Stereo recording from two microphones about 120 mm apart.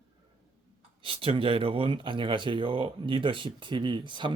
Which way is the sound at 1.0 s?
50° right (ahead or behind).